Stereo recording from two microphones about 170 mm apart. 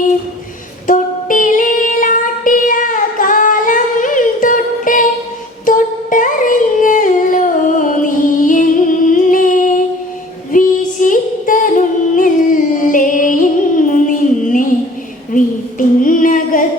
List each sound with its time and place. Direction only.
0.9 s female singing: 50° left (ahead or behind)
5.6 s music: 50° left (ahead or behind)
9.1 s humming: 50° left (ahead or behind)
10.5 s female singing: 50° left (ahead or behind)
16.0 s female singing: 50° left (ahead or behind)